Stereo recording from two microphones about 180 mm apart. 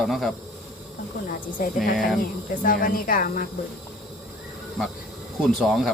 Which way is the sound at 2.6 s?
50° left (ahead or behind).